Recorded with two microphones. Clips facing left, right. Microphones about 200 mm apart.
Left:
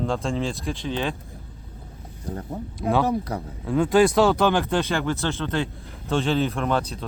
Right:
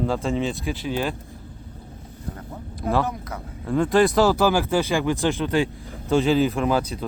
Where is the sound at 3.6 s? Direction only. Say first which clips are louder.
Even; centre (ahead or behind).